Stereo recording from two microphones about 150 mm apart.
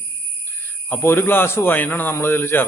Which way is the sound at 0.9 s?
15° left (ahead or behind).